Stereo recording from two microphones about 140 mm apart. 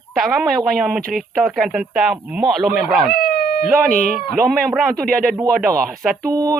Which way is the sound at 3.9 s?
90° right.